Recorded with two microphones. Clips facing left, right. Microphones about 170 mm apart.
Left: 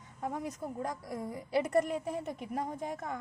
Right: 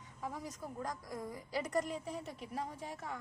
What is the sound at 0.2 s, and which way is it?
Speech, 55° left (ahead or behind).